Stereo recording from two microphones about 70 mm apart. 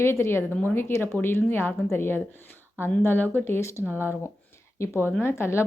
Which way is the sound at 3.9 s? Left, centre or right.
Right.